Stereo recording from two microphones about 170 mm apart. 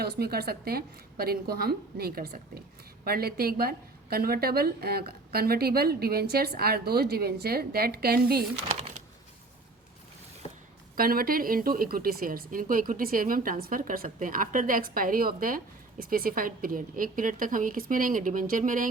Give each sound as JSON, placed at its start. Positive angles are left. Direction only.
{"t": 0.0, "sound": "a woman's voice", "side_deg": -65}
{"t": 10.4, "sound": "a sound", "side_deg": 35}
{"t": 10.9, "sound": "a woman's voice", "side_deg": -60}